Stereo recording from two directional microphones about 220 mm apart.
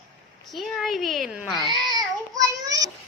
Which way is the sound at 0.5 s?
Centre (ahead or behind).